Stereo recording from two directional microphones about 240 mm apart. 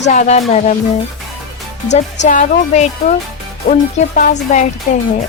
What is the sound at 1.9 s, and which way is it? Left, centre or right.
Speech, left.